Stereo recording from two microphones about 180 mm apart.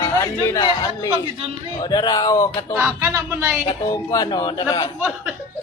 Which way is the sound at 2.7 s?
10° right (ahead or behind).